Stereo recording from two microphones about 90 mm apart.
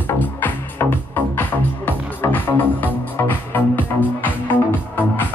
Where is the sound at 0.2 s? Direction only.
25° left (ahead or behind).